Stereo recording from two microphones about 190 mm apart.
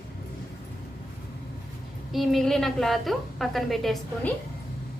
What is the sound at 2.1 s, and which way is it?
A woman's voice, centre (ahead or behind).